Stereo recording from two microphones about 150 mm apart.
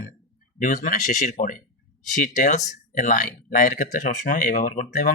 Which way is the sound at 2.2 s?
60° left (ahead or behind).